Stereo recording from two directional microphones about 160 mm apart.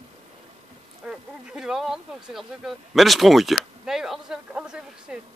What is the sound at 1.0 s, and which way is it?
Speech, 5° right (ahead or behind).